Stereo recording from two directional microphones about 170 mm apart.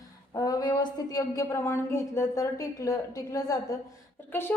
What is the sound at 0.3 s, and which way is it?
A woman's voice, 25° left (ahead or behind).